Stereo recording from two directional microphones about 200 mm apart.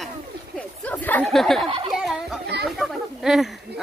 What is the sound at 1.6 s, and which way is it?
Speech, 25° right (ahead or behind).